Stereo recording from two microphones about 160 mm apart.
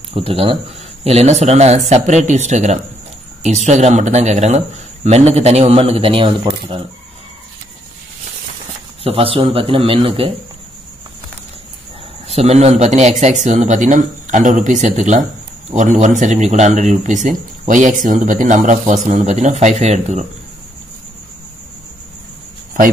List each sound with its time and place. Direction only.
0.1 s a man's voice: 35° right (ahead or behind)
9.0 s a man's voice: 35° right (ahead or behind)
12.3 s speech: 40° right (ahead or behind)